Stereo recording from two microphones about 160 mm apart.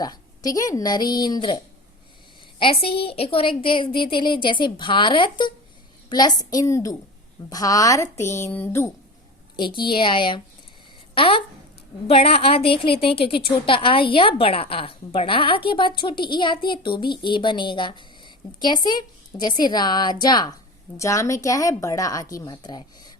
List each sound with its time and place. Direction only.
0.0 s a woman's voice: 25° left (ahead or behind)
9.6 s a woman's voice: 30° left (ahead or behind)